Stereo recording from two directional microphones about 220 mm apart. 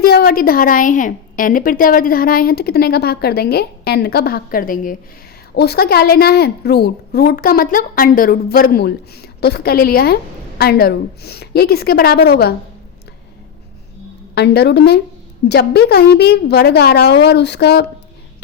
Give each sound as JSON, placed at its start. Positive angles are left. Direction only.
{"t": 0.0, "sound": "a woman's voice", "side_deg": 45}
{"t": 14.3, "sound": "a woman's voice", "side_deg": 50}